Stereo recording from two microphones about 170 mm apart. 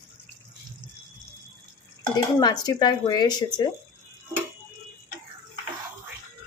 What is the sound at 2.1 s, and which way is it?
Speech, 25° left (ahead or behind).